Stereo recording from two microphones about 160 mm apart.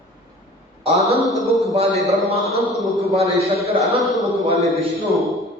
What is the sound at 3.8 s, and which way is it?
A man's voice, centre (ahead or behind).